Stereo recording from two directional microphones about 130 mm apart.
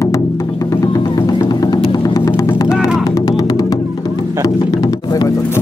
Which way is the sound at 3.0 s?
30° left (ahead or behind).